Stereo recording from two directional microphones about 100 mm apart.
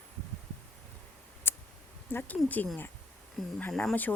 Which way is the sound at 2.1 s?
15° left (ahead or behind).